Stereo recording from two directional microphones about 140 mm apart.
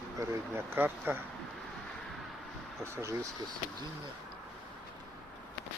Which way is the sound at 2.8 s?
20° right (ahead or behind).